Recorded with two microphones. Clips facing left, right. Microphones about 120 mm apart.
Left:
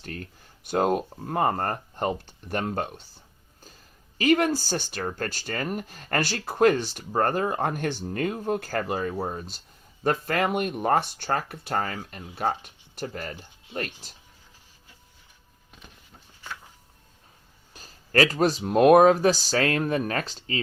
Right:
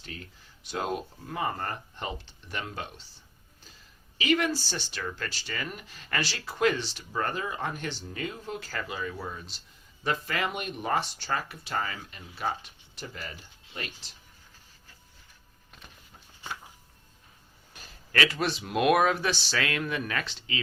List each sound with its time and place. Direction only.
0.0 s speech: 50° left (ahead or behind)
17.7 s speech: 40° left (ahead or behind)